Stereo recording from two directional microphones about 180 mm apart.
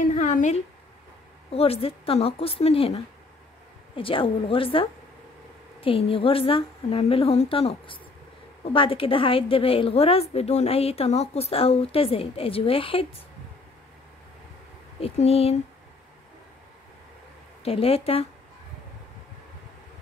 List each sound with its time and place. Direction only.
0.0 s a sound: 45° left (ahead or behind)
1.5 s a woman's voice: 35° left (ahead or behind)
15.0 s a woman's voice: 35° left (ahead or behind)
17.6 s a woman's voice: 35° left (ahead or behind)